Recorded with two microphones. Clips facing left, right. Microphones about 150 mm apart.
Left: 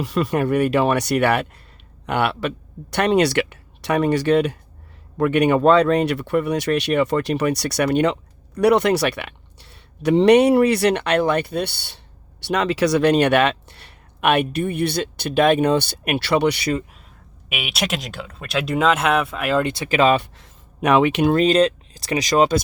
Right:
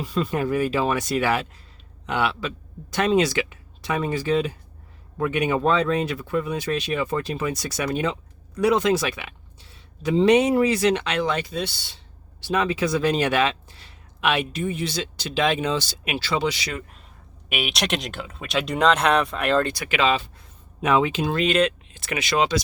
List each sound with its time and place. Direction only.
0.0 s speech: 75° left (ahead or behind)
12.5 s speech: 75° left (ahead or behind)
17.5 s speech: centre (ahead or behind)
19.6 s speech: 25° left (ahead or behind)
19.9 s speech: 45° left (ahead or behind)
20.1 s speech: 80° left
21.3 s speech: 35° left (ahead or behind)